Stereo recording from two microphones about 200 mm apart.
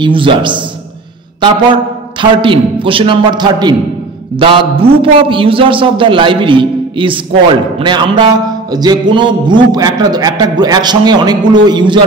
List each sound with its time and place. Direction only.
0.0 s music: 25° right (ahead or behind)
2.1 s music: 25° right (ahead or behind)